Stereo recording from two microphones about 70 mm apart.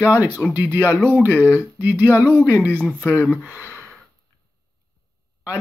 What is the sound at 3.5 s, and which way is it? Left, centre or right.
Gasp, right.